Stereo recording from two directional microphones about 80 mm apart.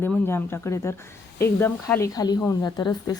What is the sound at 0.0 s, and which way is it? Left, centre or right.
Speech, left.